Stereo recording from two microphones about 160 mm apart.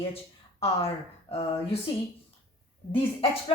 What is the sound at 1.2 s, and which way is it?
Speech, 35° left (ahead or behind).